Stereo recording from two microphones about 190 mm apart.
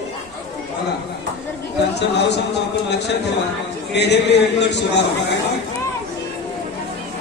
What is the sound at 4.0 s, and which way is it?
A man's voice, 65° left (ahead or behind).